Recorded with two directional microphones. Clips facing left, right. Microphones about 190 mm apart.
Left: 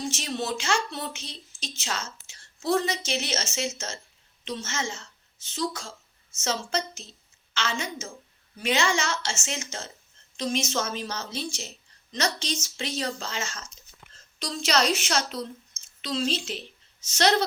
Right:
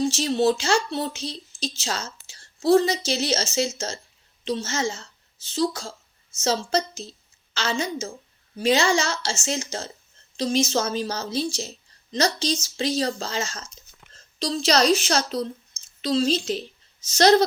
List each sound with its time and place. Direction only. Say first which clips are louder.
0.0 s a woman's voice: right 10 dB; 35° right (ahead or behind)